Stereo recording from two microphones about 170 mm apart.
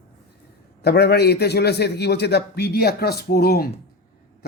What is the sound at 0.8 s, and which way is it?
Speech, 75° left (ahead or behind).